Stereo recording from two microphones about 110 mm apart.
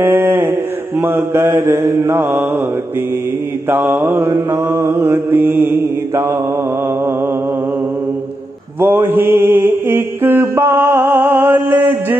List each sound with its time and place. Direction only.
0.0 s mantra: 25° right (ahead or behind)
3.6 s mantra: 20° right (ahead or behind)
8.7 s mantra: 20° right (ahead or behind)